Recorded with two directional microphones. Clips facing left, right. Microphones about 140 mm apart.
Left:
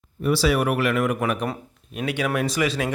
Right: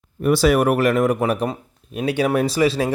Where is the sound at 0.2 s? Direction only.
50° right (ahead or behind).